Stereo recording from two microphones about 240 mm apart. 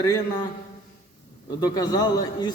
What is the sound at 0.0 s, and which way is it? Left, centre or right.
Speech, centre.